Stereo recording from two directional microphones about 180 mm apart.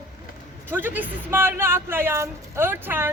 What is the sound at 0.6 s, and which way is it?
Speech, 10° right (ahead or behind).